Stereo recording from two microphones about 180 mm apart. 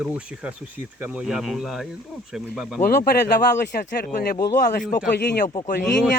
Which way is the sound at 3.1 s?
65° left (ahead or behind).